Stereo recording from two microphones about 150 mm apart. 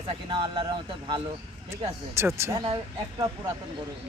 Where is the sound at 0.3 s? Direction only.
35° right (ahead or behind).